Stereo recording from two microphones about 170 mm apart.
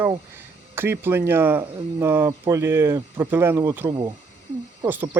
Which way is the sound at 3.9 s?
25° right (ahead or behind).